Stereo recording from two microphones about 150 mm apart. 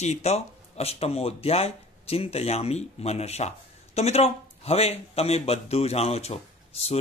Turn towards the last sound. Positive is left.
turn(degrees=45)  # may be behind; listen again after turning